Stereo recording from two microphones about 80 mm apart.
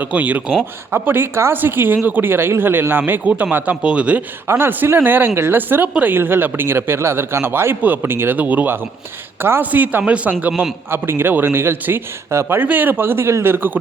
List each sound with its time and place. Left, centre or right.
0.0 s a man's voice: centre
4.4 s a man's voice: right
10.6 s a man's voice: right